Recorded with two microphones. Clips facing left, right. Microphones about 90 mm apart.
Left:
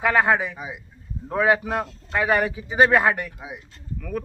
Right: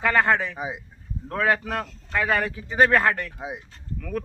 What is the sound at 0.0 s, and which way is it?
A man's voice, 10° left (ahead or behind).